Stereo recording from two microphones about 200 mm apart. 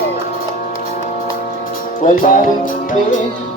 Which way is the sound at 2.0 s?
45° left (ahead or behind).